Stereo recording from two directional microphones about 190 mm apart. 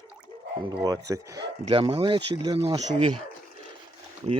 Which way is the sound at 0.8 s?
20° right (ahead or behind).